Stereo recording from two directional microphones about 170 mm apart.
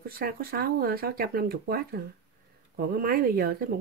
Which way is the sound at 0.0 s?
60° right (ahead or behind).